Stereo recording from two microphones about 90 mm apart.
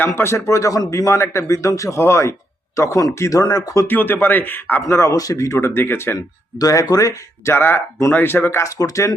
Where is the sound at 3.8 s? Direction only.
20° left (ahead or behind).